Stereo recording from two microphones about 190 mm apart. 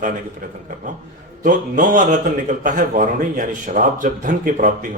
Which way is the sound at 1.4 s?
45° right (ahead or behind).